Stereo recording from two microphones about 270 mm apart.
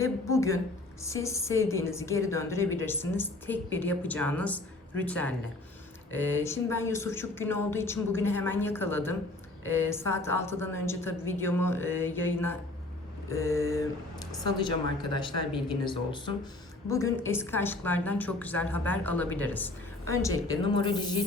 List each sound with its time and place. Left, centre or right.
0.0 s a woman's voice: centre
15.8 s a woman's voice: centre